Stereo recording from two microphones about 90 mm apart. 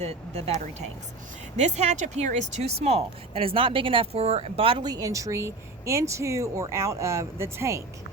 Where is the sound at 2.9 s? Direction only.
90° right.